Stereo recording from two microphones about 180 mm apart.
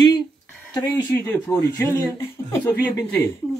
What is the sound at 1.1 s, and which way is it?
Speech, 10° left (ahead or behind).